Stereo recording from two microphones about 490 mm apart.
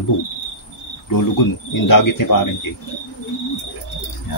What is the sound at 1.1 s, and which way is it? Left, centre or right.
Speech, left.